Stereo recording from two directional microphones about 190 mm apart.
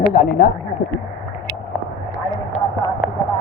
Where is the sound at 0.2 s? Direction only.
55° left (ahead or behind).